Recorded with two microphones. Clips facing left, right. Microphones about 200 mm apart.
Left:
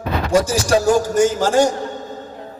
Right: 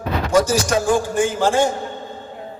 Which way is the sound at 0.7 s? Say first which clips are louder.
Left 3 dB; 40° left (ahead or behind).